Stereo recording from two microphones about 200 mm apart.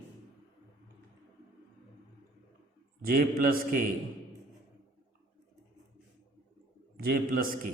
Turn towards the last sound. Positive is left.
turn(degrees=-45)  # may be behind; listen again after turning